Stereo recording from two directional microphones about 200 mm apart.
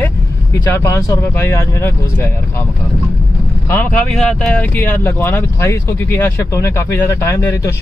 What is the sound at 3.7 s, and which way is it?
Speech, 10° left (ahead or behind).